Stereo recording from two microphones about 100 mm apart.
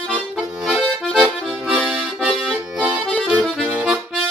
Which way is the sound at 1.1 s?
Centre (ahead or behind).